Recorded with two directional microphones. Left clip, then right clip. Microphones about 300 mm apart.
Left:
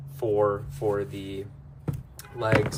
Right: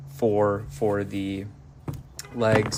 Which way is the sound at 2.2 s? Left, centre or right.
Right.